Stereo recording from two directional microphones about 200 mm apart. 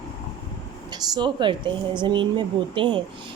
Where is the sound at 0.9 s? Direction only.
20° right (ahead or behind).